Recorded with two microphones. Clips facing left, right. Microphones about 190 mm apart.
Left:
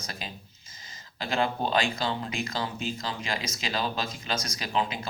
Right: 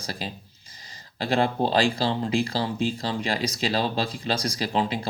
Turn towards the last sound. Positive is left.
turn(degrees=-35)  # may be behind; listen again after turning